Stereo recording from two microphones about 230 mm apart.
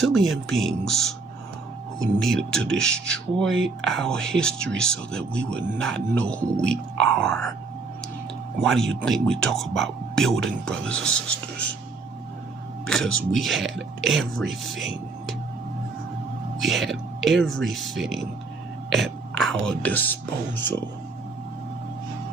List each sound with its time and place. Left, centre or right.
0.0 s speech: centre
8.6 s speech: centre
12.8 s speech: centre
16.6 s speech: centre
19.4 s speech: centre